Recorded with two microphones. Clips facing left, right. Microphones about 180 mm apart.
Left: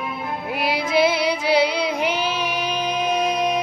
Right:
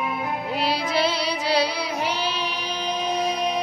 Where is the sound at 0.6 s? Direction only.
15° left (ahead or behind).